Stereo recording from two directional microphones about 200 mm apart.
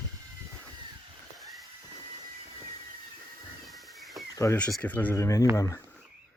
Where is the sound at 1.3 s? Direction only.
Centre (ahead or behind).